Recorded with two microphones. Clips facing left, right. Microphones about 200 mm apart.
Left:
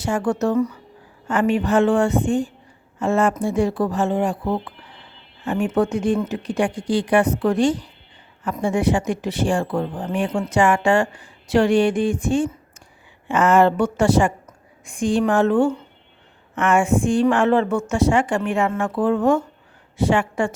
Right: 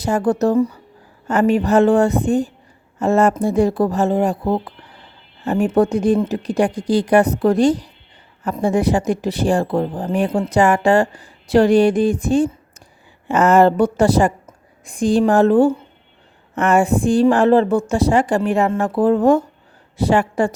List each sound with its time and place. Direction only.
0.0 s a woman's voice: 35° right (ahead or behind)